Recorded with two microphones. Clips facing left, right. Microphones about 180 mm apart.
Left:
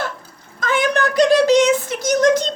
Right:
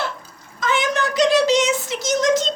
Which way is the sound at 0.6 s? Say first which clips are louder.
Left 3 dB; 55° left (ahead or behind).